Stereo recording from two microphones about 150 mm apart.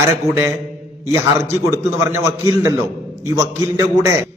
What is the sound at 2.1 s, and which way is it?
A man's voice, 20° right (ahead or behind).